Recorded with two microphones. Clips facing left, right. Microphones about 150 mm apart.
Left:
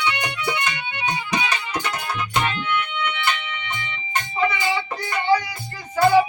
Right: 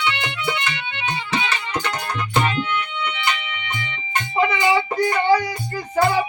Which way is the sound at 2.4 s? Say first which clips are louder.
Right 1 dB; 10° right (ahead or behind).